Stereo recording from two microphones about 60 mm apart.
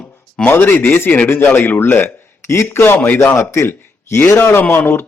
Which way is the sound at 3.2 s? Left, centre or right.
Left.